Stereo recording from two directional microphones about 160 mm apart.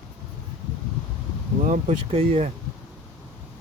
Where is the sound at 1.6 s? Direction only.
45° right (ahead or behind).